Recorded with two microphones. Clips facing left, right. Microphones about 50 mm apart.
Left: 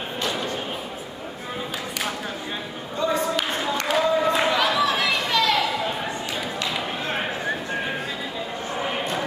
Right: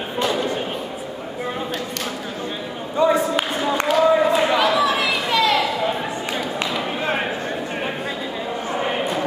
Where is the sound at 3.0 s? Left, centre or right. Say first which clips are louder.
Right 6 dB; right.